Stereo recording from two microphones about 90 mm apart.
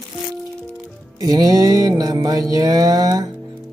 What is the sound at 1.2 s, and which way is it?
Mantra, 45° right (ahead or behind).